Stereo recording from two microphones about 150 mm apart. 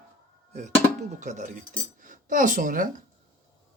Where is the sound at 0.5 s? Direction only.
55° right (ahead or behind).